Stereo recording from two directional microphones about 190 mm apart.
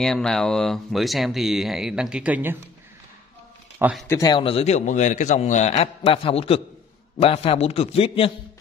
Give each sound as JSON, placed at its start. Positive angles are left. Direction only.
{"t": 0.0, "sound": "speech", "side_deg": 5}
{"t": 4.1, "sound": "a man's voice", "side_deg": 20}